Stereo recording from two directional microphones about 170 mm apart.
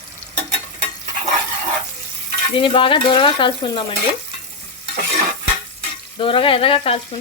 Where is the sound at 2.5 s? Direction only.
30° left (ahead or behind).